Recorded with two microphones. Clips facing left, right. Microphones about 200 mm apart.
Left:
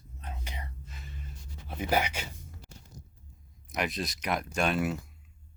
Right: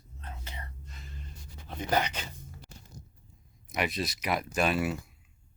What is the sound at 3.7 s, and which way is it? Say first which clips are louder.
Speech: right 1 dB; centre (ahead or behind).